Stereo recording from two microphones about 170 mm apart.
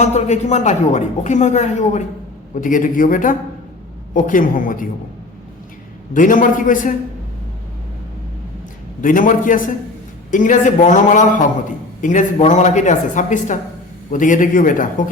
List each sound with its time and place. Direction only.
0.0 s a woman's voice: 40° left (ahead or behind)
6.1 s a woman's voice: 50° left (ahead or behind)
9.0 s a woman's voice: 50° left (ahead or behind)